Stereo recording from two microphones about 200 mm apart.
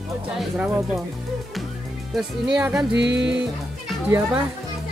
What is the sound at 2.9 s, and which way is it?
Music, 60° right (ahead or behind).